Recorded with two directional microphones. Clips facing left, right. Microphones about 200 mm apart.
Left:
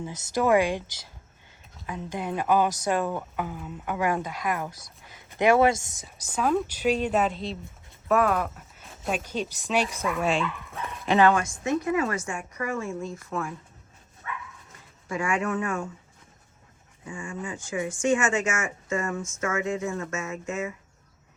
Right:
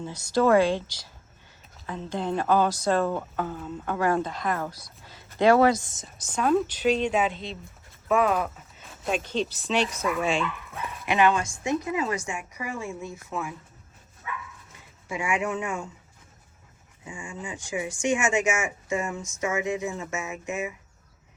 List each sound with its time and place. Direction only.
0.0 s a woman's voice: 20° left (ahead or behind)
10.2 s speech: centre (ahead or behind)
11.1 s speech: 15° right (ahead or behind)
15.1 s speech: 15° right (ahead or behind)
17.1 s speech: 15° right (ahead or behind)